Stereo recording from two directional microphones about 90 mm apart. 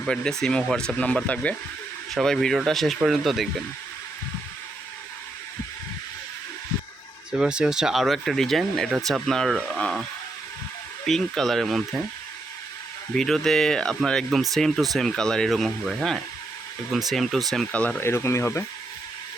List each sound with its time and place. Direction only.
0.0 s speech: 5° left (ahead or behind)
7.3 s speech: 10° right (ahead or behind)
11.0 s speech: 5° left (ahead or behind)
13.1 s speech: 5° left (ahead or behind)
17.7 s speech: 15° left (ahead or behind)
18.0 s speech: 30° left (ahead or behind)